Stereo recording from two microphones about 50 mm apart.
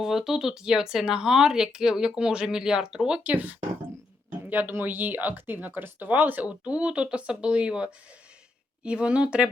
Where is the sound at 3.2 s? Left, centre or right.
Right.